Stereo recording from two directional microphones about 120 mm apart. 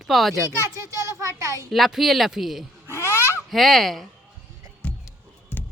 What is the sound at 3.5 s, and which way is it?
Speech, centre (ahead or behind).